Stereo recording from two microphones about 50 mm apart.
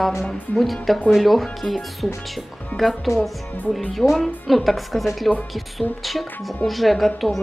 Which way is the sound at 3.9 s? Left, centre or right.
Centre.